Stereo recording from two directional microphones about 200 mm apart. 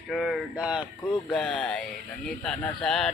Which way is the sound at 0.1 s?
Centre (ahead or behind).